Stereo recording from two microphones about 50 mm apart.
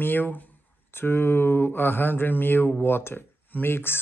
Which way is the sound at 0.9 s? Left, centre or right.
Left.